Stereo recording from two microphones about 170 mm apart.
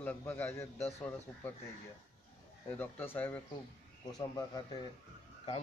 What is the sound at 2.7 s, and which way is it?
Speech, 10° left (ahead or behind).